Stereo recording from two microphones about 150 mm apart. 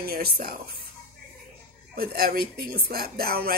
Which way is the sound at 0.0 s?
90° right.